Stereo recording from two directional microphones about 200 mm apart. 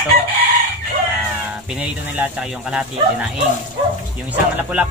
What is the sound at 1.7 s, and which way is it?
Speech, 5° right (ahead or behind).